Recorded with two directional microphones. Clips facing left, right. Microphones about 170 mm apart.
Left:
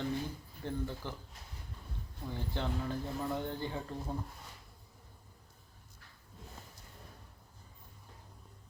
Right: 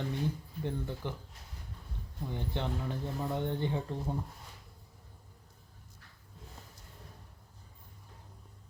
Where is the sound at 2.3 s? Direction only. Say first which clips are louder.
Right 1 dB; 20° right (ahead or behind).